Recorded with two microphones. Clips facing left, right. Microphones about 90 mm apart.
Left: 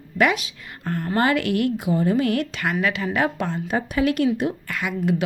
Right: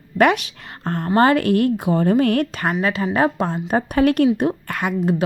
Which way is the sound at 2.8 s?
35° right (ahead or behind).